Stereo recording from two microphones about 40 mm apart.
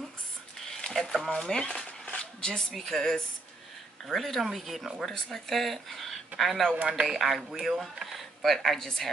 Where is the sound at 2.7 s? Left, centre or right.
Centre.